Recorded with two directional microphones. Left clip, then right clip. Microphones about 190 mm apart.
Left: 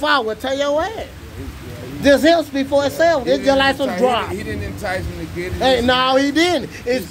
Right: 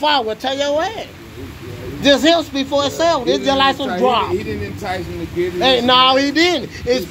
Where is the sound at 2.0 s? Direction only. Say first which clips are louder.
Even; 15° left (ahead or behind).